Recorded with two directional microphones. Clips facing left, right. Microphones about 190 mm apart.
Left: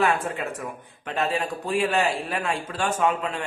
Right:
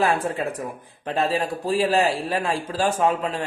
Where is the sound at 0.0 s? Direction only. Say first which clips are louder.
Right 2 dB; 35° right (ahead or behind).